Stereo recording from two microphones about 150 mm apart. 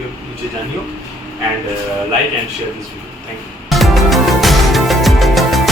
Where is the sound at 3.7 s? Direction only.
Centre (ahead or behind).